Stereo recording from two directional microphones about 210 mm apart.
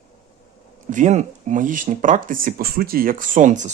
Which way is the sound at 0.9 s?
35° right (ahead or behind).